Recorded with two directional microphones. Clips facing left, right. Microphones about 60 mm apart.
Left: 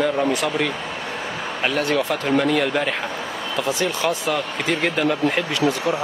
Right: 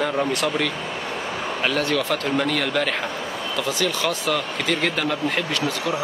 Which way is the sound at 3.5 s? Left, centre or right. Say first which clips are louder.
Left 2 dB; left.